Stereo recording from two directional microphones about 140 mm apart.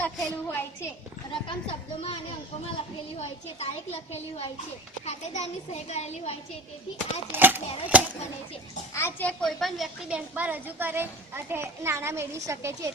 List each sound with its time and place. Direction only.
0.0 s a woman's voice: 10° left (ahead or behind)
1.3 s speech: 40° left (ahead or behind)
3.2 s a woman's voice: 50° left (ahead or behind)
7.3 s a woman's voice: 15° right (ahead or behind)
8.9 s a woman's voice: 20° left (ahead or behind)
9.4 s a woman's voice: centre (ahead or behind); by 12.9 s 20° right (ahead or behind)